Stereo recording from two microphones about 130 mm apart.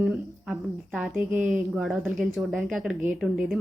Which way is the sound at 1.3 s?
75° right (ahead or behind).